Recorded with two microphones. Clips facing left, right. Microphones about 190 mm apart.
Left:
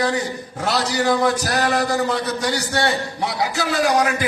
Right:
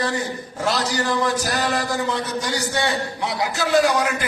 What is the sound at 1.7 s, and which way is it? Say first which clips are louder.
A man's voice: left 3 dB; 65° left (ahead or behind).